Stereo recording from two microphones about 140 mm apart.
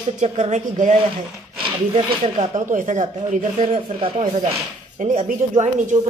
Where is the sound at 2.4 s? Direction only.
65° right (ahead or behind).